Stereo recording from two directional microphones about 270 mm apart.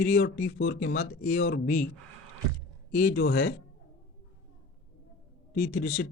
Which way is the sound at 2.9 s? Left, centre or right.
Left.